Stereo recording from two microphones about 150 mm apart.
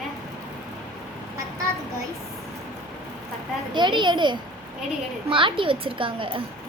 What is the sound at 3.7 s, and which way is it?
A child's voice, 30° right (ahead or behind).